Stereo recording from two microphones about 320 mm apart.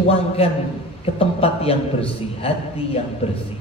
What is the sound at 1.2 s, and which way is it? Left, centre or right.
A woman's voice, centre.